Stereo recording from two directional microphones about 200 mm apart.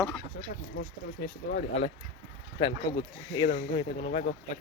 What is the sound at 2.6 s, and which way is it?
Speech, 25° left (ahead or behind).